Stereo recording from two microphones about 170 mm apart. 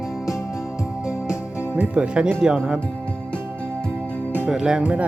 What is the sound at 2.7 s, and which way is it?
Music, 5° left (ahead or behind).